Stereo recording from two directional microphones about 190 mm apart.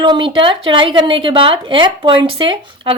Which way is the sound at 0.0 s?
25° right (ahead or behind).